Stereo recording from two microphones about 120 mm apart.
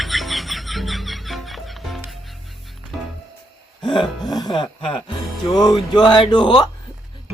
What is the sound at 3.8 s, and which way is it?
Gasp, 45° left (ahead or behind).